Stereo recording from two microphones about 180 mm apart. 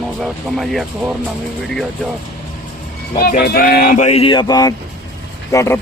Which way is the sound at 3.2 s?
55° left (ahead or behind).